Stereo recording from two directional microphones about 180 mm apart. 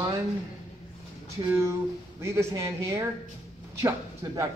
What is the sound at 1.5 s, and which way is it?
Speech, 15° right (ahead or behind).